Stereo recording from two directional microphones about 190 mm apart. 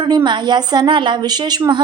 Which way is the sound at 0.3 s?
25° right (ahead or behind).